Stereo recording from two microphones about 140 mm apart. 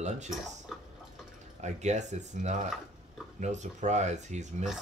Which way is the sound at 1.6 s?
55° right (ahead or behind).